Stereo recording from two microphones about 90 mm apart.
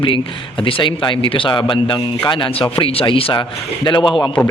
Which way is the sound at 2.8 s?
90° left.